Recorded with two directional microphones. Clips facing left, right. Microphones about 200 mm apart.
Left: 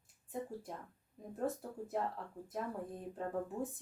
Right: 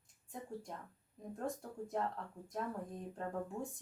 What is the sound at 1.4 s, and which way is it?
Speech, 5° left (ahead or behind).